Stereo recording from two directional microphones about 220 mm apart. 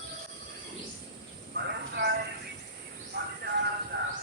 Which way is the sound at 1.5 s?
50° right (ahead or behind).